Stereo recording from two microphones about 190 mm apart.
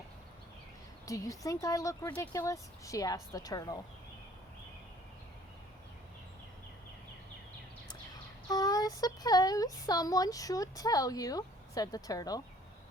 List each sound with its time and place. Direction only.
1.0 s speech: 15° left (ahead or behind)
8.4 s speech: 20° left (ahead or behind)